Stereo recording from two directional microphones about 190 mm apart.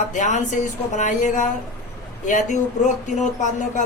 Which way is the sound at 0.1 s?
40° left (ahead or behind).